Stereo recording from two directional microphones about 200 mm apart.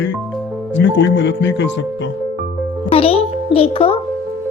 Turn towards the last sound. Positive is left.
turn(degrees=30)  # may be behind; listen again after turning